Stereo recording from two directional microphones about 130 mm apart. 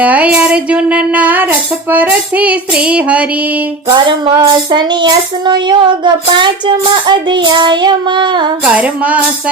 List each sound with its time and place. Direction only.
0.0 s speech: 10° right (ahead or behind)
3.8 s speech: 35° right (ahead or behind)
8.6 s speech: 10° right (ahead or behind)